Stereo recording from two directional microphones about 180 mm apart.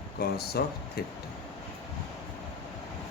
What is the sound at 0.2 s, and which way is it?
Speech, 60° left (ahead or behind).